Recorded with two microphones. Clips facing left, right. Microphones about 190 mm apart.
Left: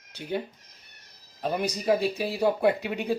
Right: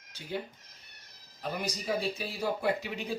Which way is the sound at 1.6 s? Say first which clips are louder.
Left 8 dB; 65° left (ahead or behind).